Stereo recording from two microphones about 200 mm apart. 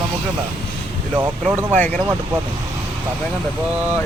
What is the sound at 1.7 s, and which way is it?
Speech, 10° left (ahead or behind).